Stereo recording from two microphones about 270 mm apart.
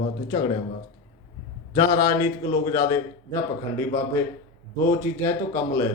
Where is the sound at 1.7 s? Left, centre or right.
Centre.